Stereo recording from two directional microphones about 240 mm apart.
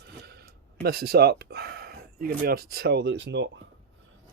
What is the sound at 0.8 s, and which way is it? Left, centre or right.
Speech, right.